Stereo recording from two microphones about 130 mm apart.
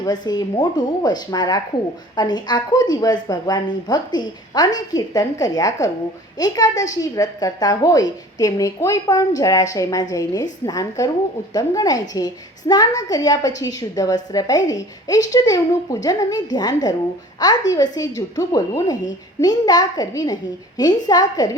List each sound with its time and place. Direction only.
0.0 s a woman's voice: 30° left (ahead or behind)